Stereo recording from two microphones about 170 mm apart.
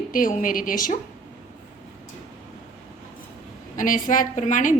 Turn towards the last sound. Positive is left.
turn(degrees=50)  # may be behind; listen again after turning